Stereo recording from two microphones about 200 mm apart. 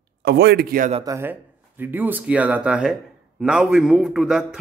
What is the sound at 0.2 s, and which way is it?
Speech, 55° right (ahead or behind).